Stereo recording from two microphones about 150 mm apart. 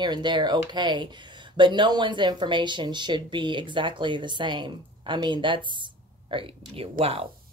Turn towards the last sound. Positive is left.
turn(degrees=-40)  # may be behind; listen again after turning